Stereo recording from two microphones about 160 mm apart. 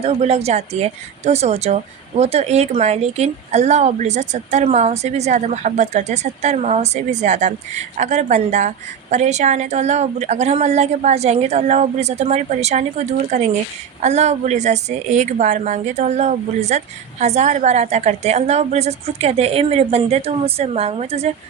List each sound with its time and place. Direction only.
0.0 s speech: 40° right (ahead or behind)